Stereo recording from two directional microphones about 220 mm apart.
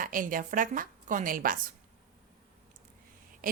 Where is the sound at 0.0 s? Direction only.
40° right (ahead or behind).